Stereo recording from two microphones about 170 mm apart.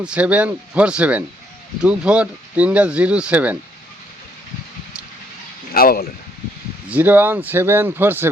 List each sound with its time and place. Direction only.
0.0 s speech: 5° right (ahead or behind)
5.7 s speech: 60° left (ahead or behind)
6.9 s speech: 10° right (ahead or behind)